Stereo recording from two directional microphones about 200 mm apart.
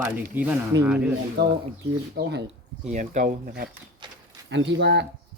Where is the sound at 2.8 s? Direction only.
35° right (ahead or behind).